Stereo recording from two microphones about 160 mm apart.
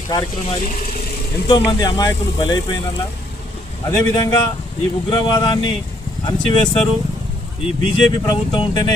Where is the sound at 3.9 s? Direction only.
20° left (ahead or behind).